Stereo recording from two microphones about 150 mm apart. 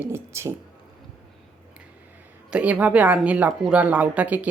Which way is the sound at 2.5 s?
10° right (ahead or behind).